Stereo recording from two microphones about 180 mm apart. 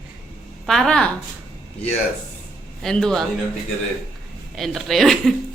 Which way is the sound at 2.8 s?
5° left (ahead or behind).